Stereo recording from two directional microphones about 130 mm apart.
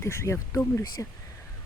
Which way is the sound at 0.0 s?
20° left (ahead or behind).